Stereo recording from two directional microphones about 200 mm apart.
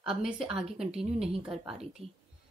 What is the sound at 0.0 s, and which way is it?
A woman's voice, 5° right (ahead or behind).